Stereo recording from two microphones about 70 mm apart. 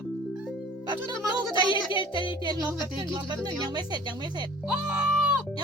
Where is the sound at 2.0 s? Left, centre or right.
Right.